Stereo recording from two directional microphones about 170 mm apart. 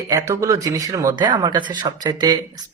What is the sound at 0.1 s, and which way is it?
Speech, 20° right (ahead or behind).